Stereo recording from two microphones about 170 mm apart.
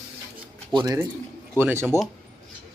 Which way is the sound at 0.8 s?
15° right (ahead or behind).